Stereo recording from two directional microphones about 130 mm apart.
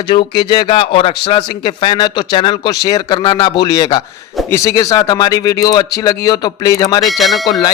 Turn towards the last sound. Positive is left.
turn(degrees=0)  # may be behind; listen again after turning